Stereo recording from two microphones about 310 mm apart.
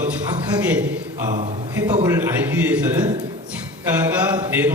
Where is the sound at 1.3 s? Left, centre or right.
Right.